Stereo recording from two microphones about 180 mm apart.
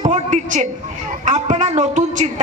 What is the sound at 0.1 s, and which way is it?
A woman's voice, 40° right (ahead or behind).